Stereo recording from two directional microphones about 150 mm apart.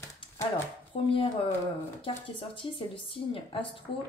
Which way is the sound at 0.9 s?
40° left (ahead or behind).